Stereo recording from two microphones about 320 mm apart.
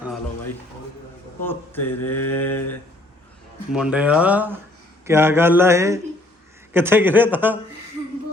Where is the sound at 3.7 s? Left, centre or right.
Centre.